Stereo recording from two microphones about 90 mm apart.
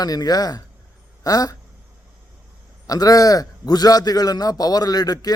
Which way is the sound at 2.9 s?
45° left (ahead or behind).